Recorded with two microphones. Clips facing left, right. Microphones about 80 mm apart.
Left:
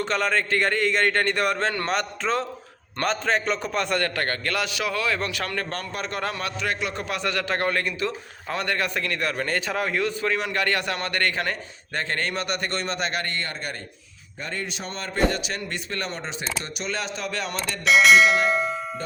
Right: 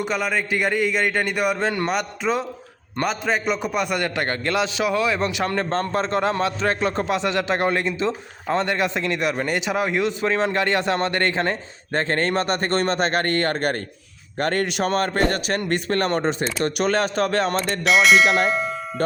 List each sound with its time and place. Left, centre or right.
0.0 s a man's voice: centre; by 13.8 s right
14.3 s a man's voice: right
17.8 s speech: centre